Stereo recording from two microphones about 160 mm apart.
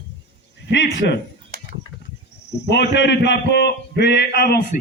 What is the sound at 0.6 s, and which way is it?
Speech, 90° left.